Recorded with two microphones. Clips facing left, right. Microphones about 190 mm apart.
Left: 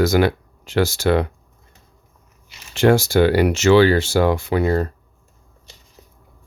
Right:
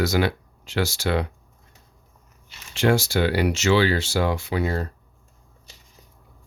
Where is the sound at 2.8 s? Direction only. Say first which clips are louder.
Left 6 dB; 50° left (ahead or behind).